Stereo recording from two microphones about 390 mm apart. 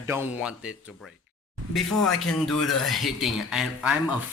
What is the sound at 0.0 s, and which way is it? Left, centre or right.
Speech, centre.